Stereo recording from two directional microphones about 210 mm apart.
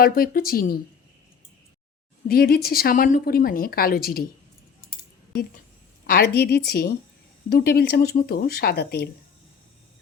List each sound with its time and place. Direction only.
0.0 s a woman's voice: 45° left (ahead or behind)
2.2 s a woman's voice: 45° left (ahead or behind)
4.9 s a sound: 45° left (ahead or behind)
6.1 s a woman's voice: 45° left (ahead or behind)